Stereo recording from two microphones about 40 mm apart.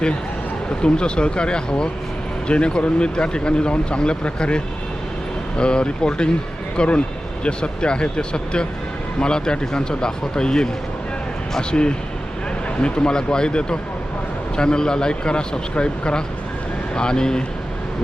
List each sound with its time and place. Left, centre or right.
0.8 s speech: left
11.7 s speech: left